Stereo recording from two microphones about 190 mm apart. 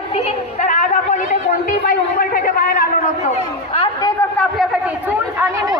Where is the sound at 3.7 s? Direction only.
25° left (ahead or behind).